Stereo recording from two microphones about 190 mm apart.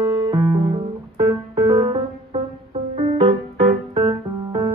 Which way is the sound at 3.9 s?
25° right (ahead or behind).